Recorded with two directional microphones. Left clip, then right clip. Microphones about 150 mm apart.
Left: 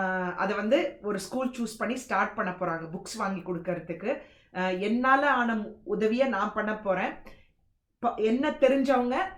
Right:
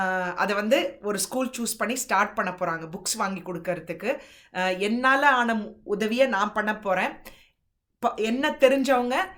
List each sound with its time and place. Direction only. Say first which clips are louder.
0.0 s speech: right 4 dB; 20° right (ahead or behind)
8.1 s speech: right 1 dB; 25° right (ahead or behind)